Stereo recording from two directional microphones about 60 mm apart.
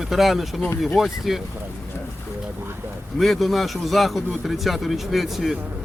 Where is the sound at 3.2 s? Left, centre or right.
Centre.